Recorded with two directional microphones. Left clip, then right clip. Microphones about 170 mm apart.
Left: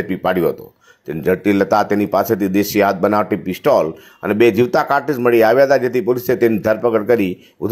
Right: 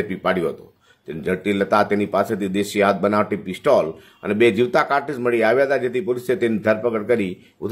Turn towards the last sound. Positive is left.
turn(degrees=30)  # may be behind; listen again after turning